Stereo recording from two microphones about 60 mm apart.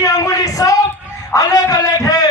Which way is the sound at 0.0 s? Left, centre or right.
Left.